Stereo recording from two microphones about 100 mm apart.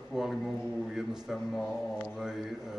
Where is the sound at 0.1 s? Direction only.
5° right (ahead or behind).